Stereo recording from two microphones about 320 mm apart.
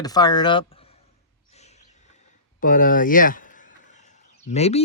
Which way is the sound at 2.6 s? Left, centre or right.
Left.